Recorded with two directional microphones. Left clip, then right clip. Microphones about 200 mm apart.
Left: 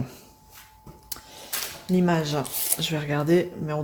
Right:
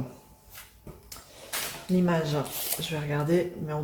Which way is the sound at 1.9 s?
50° left (ahead or behind).